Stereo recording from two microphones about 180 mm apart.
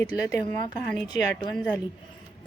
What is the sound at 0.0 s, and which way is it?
Speech, 20° left (ahead or behind).